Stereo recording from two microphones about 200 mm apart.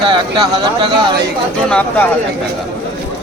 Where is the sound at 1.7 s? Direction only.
5° left (ahead or behind).